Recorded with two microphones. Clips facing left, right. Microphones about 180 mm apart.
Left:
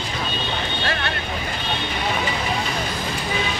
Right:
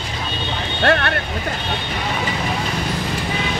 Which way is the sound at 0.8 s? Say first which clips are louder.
Right 12 dB; 60° right (ahead or behind).